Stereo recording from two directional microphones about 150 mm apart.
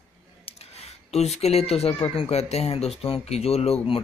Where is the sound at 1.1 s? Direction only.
45° left (ahead or behind).